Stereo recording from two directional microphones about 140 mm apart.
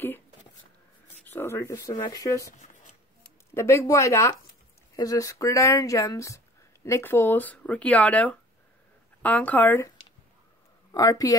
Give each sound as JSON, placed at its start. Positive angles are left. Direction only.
{"t": 1.2, "sound": "speech", "side_deg": 15}
{"t": 2.6, "sound": "shuffling cards", "side_deg": 65}
{"t": 3.5, "sound": "speech", "side_deg": 20}